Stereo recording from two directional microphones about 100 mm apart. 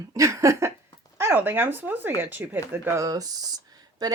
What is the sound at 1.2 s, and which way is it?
Speech, 20° right (ahead or behind).